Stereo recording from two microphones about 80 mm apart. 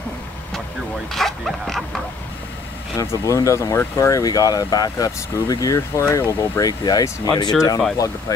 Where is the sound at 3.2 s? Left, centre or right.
Left.